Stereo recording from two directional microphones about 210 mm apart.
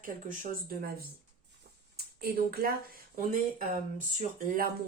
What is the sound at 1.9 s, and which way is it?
Speech, 45° right (ahead or behind).